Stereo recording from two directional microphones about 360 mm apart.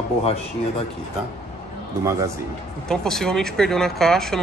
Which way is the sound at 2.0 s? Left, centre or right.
Centre.